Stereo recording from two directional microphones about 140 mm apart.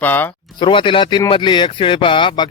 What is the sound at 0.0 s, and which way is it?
Speech, 15° left (ahead or behind).